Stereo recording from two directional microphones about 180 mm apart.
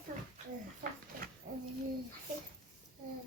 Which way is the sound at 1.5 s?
50° right (ahead or behind).